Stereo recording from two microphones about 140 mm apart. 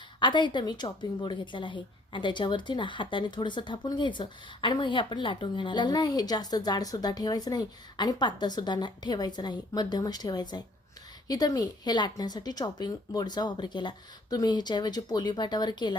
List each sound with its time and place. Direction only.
0.2 s a woman's voice: 35° left (ahead or behind)